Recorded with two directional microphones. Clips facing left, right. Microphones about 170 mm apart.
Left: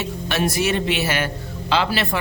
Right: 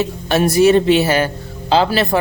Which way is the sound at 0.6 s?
35° right (ahead or behind).